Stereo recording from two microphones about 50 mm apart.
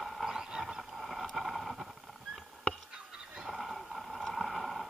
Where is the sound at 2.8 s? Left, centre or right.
Centre.